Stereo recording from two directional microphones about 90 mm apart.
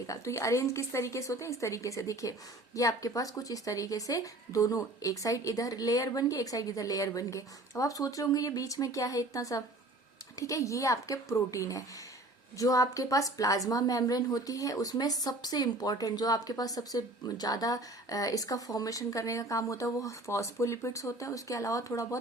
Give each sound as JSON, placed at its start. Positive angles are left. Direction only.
{"t": 0.1, "sound": "speech", "side_deg": 35}